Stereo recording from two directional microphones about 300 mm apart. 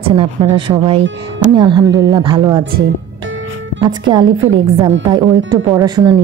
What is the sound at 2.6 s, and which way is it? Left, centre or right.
Speech, right.